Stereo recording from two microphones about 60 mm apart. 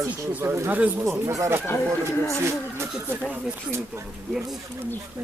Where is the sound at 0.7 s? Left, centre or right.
Right.